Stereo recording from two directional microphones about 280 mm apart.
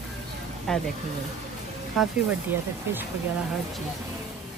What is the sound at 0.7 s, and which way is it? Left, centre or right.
Speech, centre.